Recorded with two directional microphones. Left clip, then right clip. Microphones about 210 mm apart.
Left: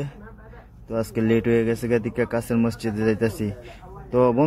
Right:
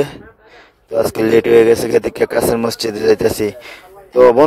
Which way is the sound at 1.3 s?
50° right (ahead or behind).